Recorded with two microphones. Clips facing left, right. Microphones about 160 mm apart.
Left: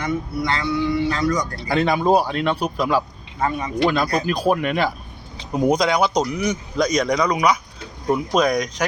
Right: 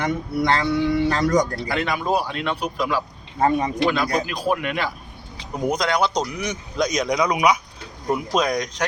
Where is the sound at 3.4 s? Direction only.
35° right (ahead or behind).